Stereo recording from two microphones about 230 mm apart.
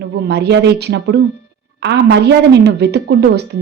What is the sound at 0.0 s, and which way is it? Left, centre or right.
A woman's voice, right.